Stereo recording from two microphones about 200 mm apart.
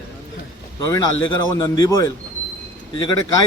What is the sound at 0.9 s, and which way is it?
A man's voice, 15° left (ahead or behind).